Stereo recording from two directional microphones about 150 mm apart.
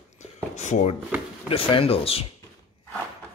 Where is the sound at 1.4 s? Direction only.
40° left (ahead or behind).